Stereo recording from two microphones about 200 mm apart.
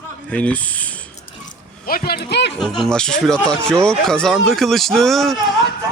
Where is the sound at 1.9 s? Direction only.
50° left (ahead or behind).